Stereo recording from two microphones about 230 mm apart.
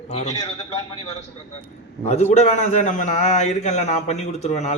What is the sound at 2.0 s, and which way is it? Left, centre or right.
A man's voice, left.